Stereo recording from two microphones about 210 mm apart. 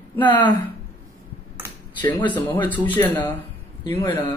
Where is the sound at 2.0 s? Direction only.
10° left (ahead or behind).